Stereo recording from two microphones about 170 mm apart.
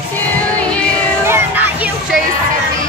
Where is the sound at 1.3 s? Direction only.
10° right (ahead or behind).